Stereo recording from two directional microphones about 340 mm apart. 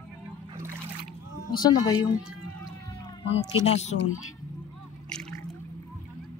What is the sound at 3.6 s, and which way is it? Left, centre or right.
Speech, centre.